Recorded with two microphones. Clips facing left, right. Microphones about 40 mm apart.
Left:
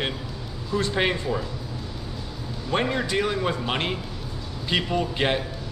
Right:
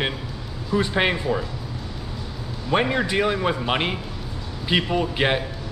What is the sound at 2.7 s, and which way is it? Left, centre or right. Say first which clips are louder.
A man's voice: right 3 dB; centre.